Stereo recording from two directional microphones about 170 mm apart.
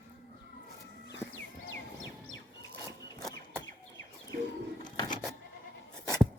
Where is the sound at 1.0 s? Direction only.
90° left.